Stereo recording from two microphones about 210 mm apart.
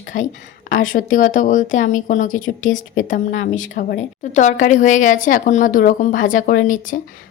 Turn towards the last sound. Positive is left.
turn(degrees=40)  # may be behind; listen again after turning